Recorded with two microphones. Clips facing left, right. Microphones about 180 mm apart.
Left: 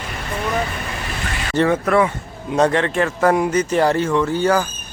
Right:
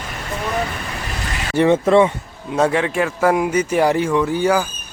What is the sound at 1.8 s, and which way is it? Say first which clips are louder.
Speech: right 3 dB; 25° right (ahead or behind).